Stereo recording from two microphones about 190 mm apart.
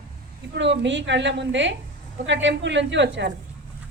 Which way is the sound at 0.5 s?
65° right (ahead or behind).